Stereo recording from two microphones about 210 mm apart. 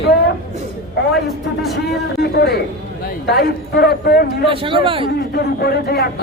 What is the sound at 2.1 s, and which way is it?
A man's voice, 50° left (ahead or behind).